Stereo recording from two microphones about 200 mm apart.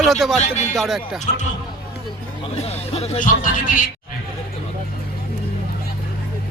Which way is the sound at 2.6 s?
30° left (ahead or behind).